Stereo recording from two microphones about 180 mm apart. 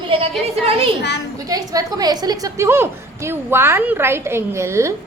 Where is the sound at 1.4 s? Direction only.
20° right (ahead or behind).